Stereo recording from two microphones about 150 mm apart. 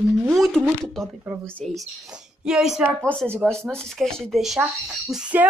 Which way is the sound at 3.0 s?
10° left (ahead or behind).